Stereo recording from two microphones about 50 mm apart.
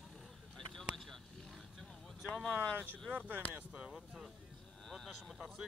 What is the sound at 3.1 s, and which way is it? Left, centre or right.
Speech, right.